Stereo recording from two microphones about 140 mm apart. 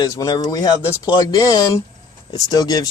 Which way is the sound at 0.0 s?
25° left (ahead or behind).